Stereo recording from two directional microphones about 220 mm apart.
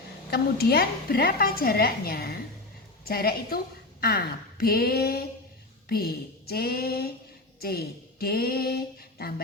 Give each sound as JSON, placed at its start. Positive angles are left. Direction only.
{"t": 0.3, "sound": "a woman's voice", "side_deg": 45}